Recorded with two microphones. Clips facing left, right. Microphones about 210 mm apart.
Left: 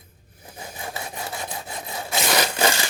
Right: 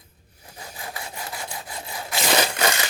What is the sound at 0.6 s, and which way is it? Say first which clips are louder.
Sawing: left 3 dB; 25° left (ahead or behind).